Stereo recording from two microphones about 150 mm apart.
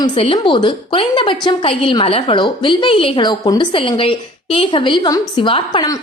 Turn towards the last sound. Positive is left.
turn(degrees=30)  # may be behind; listen again after turning